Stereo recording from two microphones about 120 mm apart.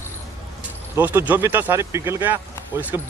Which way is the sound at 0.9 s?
15° right (ahead or behind).